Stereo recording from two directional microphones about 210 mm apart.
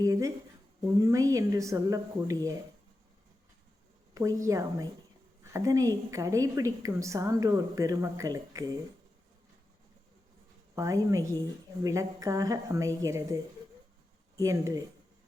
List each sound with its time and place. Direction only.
0.0 s a woman's voice: 15° right (ahead or behind)
4.1 s a woman's voice: 15° right (ahead or behind)
10.8 s a woman's voice: 15° right (ahead or behind)